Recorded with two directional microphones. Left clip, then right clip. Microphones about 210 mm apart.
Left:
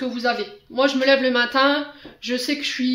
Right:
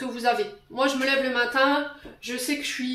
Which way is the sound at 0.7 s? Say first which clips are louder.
Left 6 dB; 45° left (ahead or behind).